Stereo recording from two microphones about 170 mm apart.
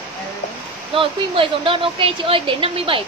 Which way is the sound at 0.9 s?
30° right (ahead or behind).